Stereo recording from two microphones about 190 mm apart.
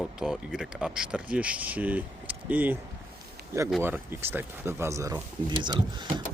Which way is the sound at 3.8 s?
10° right (ahead or behind).